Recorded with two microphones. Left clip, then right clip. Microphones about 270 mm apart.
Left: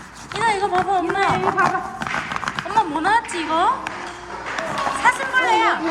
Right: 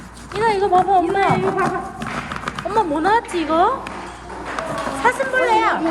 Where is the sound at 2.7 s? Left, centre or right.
Centre.